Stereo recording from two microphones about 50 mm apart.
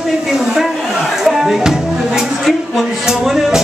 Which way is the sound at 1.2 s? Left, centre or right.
Centre.